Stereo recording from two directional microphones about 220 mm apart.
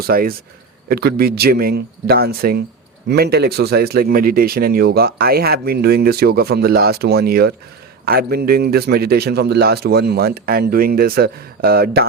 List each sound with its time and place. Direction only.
0.0 s speech: 40° right (ahead or behind)